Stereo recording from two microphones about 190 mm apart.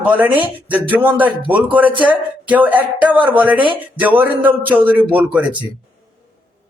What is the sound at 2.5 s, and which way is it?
Speech, 10° right (ahead or behind).